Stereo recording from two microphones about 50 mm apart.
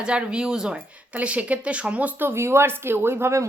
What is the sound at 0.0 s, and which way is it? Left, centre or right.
Speech, centre.